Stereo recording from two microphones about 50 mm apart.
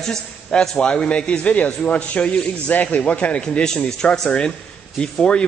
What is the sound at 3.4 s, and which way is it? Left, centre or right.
Speech, centre.